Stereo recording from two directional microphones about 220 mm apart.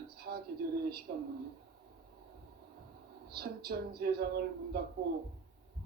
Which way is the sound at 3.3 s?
45° right (ahead or behind).